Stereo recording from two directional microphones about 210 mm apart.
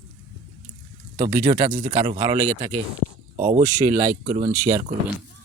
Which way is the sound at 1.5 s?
35° right (ahead or behind).